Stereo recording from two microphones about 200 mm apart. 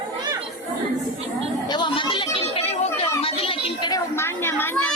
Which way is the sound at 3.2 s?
30° left (ahead or behind).